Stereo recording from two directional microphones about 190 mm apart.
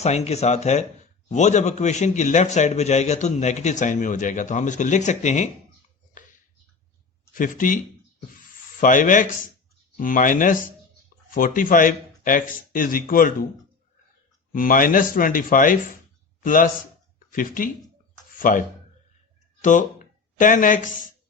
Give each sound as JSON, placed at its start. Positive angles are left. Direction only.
{"t": 0.0, "sound": "a man's voice", "side_deg": 35}
{"t": 7.3, "sound": "speech", "side_deg": 45}
{"t": 8.8, "sound": "speech", "side_deg": 45}
{"t": 14.5, "sound": "speech", "side_deg": 45}
{"t": 20.4, "sound": "speech", "side_deg": 45}